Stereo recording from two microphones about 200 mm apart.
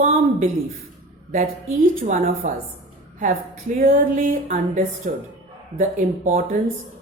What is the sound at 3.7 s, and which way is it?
Speech, 45° right (ahead or behind).